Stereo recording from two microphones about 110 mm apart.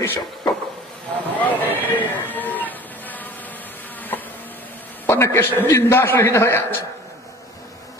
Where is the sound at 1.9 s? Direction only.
15° left (ahead or behind).